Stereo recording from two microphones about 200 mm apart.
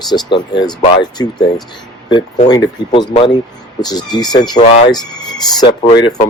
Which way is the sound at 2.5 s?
20° left (ahead or behind).